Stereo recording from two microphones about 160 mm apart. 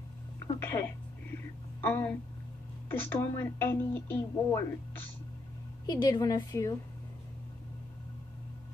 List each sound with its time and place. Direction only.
0.6 s a sound: 15° left (ahead or behind)
2.9 s speech: 10° left (ahead or behind)
5.9 s a woman's voice: 25° left (ahead or behind)